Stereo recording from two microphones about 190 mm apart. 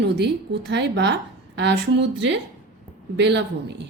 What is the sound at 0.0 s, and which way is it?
A woman's voice, 65° right (ahead or behind).